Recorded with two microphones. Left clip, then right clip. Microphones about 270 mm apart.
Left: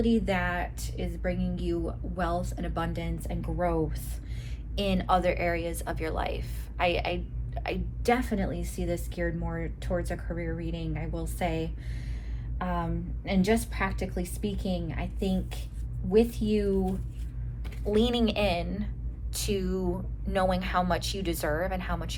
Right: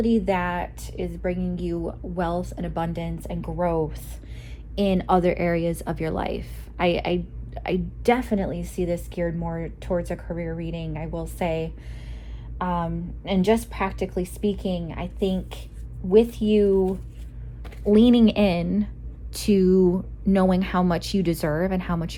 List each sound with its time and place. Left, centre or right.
0.0 s speech: right
17.9 s speech: right